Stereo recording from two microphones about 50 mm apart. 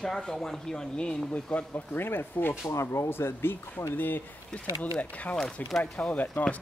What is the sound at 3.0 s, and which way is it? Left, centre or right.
Speech, left.